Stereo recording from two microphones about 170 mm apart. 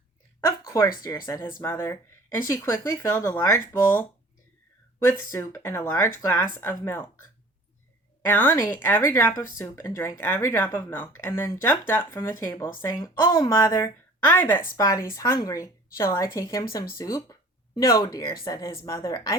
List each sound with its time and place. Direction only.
1.0 s speech: 20° left (ahead or behind)
5.0 s speech: 15° left (ahead or behind)
8.2 s a woman's voice: 10° left (ahead or behind)